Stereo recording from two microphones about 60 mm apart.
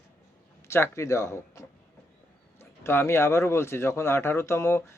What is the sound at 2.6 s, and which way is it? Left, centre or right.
Speech, left.